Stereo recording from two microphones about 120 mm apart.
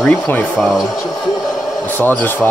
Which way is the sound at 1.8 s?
15° left (ahead or behind).